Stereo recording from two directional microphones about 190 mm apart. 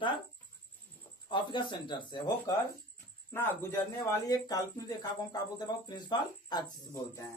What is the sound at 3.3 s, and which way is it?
Speech, 10° left (ahead or behind).